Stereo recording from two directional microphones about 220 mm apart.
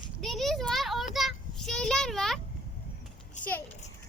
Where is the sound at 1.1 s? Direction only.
Centre (ahead or behind).